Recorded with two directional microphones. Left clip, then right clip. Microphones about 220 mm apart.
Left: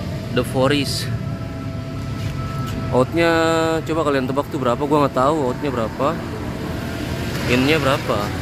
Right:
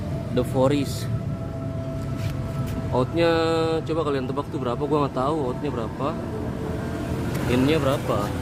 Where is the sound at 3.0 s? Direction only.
25° left (ahead or behind).